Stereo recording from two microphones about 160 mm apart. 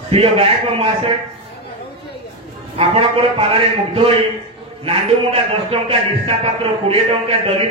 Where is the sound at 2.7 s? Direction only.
40° right (ahead or behind).